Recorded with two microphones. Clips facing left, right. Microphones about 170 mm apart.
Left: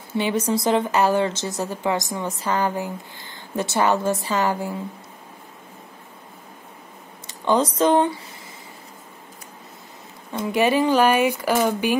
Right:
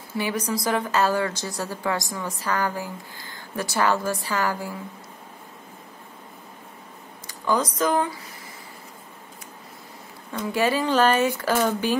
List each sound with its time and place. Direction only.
0.1 s speech: 25° left (ahead or behind)
7.2 s speech: 25° left (ahead or behind)
10.5 s speech: 20° left (ahead or behind)